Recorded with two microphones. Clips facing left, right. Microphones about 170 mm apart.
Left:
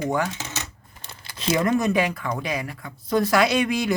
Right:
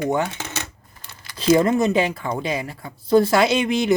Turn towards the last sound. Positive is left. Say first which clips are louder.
# right 2 dB
turn(degrees=-25)  # may be behind; listen again after turning